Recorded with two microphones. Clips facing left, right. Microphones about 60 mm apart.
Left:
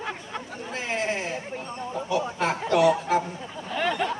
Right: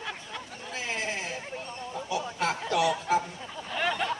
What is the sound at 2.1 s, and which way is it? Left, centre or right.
Speech, left.